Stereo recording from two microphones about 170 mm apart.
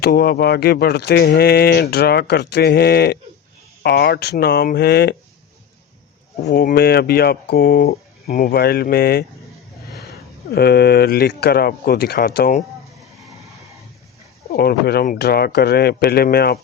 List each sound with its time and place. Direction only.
0.0 s speech: 65° left (ahead or behind)
6.5 s speech: 65° left (ahead or behind)
10.5 s speech: 70° left (ahead or behind)
14.5 s speech: 65° left (ahead or behind)